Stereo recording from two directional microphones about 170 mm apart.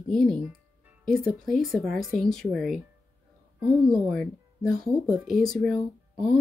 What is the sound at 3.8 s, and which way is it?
Speech, centre (ahead or behind).